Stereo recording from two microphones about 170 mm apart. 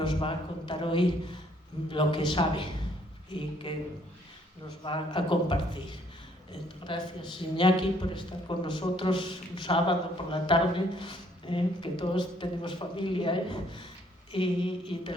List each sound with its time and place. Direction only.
0.0 s a woman's voice: 30° left (ahead or behind)
4.8 s a woman's voice: 30° left (ahead or behind)
6.8 s a woman's voice: 30° left (ahead or behind)
14.3 s a sound: 30° left (ahead or behind)